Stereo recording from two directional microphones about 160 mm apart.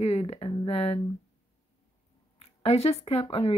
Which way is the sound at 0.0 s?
40° left (ahead or behind).